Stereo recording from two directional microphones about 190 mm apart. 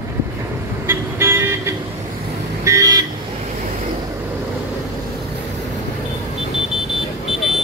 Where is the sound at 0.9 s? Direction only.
10° right (ahead or behind).